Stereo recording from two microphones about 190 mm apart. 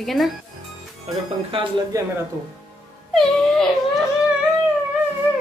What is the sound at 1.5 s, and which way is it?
Speech, 25° right (ahead or behind).